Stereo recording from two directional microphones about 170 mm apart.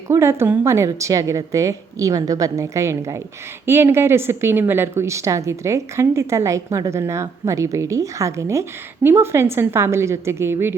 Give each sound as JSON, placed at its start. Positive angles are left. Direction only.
{"t": 0.1, "sound": "a woman's voice", "side_deg": -15}